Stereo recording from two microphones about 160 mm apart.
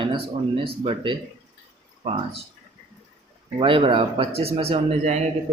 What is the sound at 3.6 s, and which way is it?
Speech, 35° right (ahead or behind).